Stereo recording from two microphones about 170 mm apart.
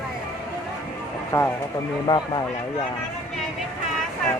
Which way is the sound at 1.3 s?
15° left (ahead or behind).